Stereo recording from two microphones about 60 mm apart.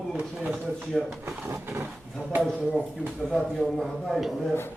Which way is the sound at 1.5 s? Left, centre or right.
Right.